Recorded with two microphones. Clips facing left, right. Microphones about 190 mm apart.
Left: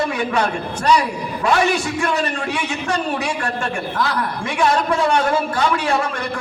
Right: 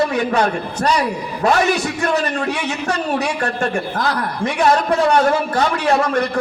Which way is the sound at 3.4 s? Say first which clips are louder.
Right 4 dB; 40° right (ahead or behind).